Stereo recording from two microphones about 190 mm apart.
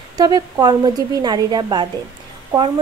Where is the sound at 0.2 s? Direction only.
20° right (ahead or behind).